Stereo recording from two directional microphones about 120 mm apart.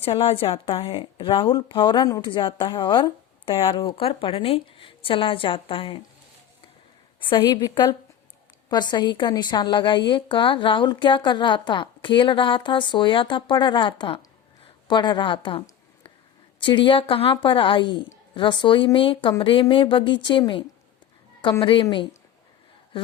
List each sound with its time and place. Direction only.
0.0 s speech: 50° left (ahead or behind)
7.3 s a woman's voice: 35° left (ahead or behind)